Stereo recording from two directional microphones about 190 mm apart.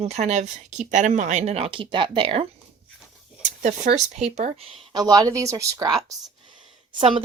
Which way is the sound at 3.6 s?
40° right (ahead or behind).